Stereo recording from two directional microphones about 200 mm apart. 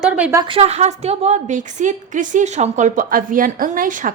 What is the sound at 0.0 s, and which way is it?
Speech, 5° right (ahead or behind).